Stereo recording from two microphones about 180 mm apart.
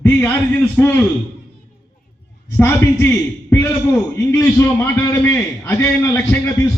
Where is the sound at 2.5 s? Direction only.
10° left (ahead or behind).